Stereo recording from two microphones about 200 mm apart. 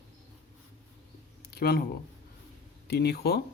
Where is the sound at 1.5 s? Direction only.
50° left (ahead or behind).